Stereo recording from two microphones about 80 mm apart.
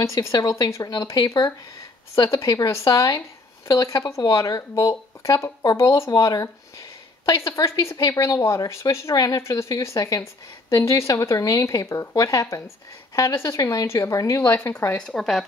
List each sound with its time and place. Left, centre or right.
0.1 s speech: left
5.9 s speech: left
9.1 s speech: left
9.4 s speech: left
15.0 s speech: centre